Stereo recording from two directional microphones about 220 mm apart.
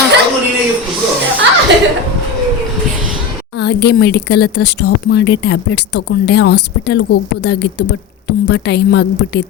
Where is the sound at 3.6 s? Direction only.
50° left (ahead or behind).